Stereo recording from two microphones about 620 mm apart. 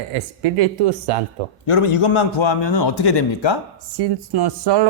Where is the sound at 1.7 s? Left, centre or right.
Left.